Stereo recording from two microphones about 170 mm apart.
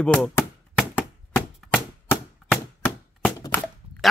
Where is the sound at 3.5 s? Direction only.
10° left (ahead or behind).